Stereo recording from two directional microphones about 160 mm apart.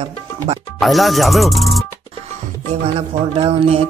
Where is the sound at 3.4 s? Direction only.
40° right (ahead or behind).